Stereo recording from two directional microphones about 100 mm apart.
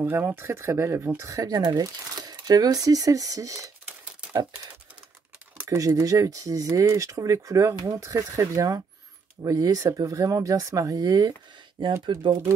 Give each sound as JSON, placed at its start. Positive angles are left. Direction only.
{"t": 0.0, "sound": "speech", "side_deg": -25}
{"t": 5.6, "sound": "speech", "side_deg": -30}
{"t": 11.8, "sound": "speech", "side_deg": -55}